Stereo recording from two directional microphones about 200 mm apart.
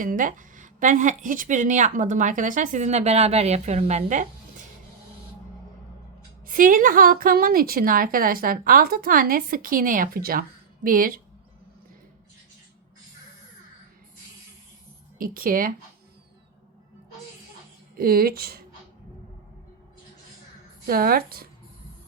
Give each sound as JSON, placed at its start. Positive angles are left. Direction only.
{"t": 0.0, "sound": "speech", "side_deg": -40}
{"t": 6.4, "sound": "a woman's voice", "side_deg": -45}
{"t": 15.2, "sound": "a woman's voice", "side_deg": -45}
{"t": 17.9, "sound": "a woman's voice", "side_deg": -45}
{"t": 20.8, "sound": "a woman's voice", "side_deg": -45}